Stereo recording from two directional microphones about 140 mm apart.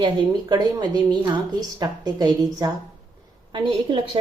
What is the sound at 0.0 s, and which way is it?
A woman's voice, 30° right (ahead or behind).